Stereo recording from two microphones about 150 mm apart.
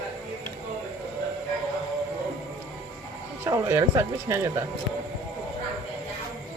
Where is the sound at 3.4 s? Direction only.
20° right (ahead or behind).